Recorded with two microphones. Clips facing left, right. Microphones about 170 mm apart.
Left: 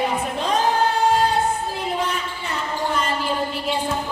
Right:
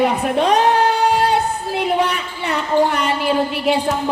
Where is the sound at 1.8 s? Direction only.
70° right (ahead or behind).